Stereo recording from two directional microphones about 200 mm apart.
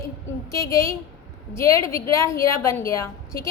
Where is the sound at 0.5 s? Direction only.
15° left (ahead or behind).